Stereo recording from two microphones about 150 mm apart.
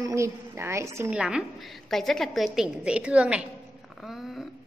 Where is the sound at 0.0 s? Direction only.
20° right (ahead or behind).